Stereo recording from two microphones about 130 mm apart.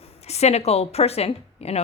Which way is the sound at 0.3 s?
55° left (ahead or behind).